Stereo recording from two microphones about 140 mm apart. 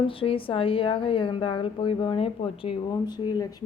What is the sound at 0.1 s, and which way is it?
Speech, 40° left (ahead or behind).